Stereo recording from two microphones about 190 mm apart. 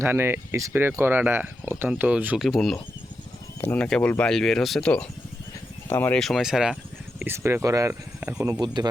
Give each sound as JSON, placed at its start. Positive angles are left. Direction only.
{"t": 0.0, "sound": "speech", "side_deg": -10}
{"t": 8.6, "sound": "speech", "side_deg": -25}